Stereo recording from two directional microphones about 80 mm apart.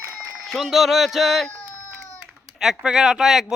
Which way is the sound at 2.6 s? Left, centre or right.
Centre.